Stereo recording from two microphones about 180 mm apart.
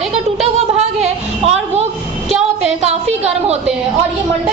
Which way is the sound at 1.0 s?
35° right (ahead or behind).